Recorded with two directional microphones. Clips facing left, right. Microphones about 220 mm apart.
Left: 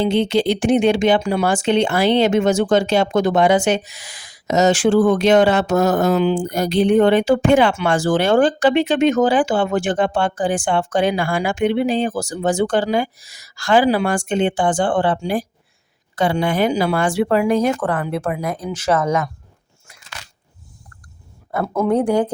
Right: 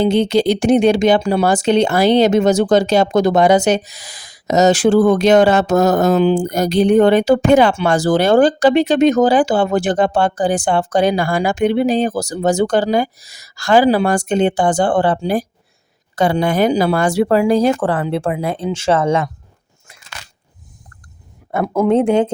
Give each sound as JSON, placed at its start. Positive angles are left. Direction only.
{"t": 0.0, "sound": "speech", "side_deg": -40}
{"t": 21.5, "sound": "speech", "side_deg": -25}